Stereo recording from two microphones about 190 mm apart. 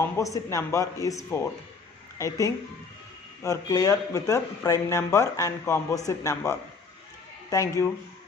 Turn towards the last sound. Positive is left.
turn(degrees=15)  # may be behind; listen again after turning